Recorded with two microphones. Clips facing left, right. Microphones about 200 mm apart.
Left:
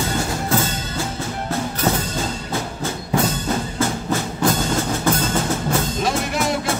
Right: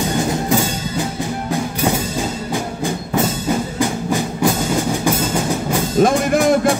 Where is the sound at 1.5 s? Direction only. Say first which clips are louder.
Right 2 dB; 15° right (ahead or behind).